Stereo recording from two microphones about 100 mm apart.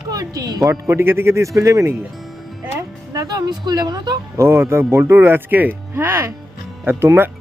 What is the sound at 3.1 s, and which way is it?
Speech, 40° right (ahead or behind).